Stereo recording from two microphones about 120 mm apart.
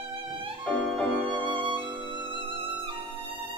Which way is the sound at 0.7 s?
10° left (ahead or behind).